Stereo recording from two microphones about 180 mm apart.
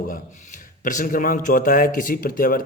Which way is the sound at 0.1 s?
45° left (ahead or behind).